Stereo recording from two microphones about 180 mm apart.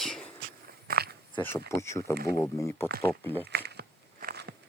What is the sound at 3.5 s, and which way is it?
Biting, 65° right (ahead or behind).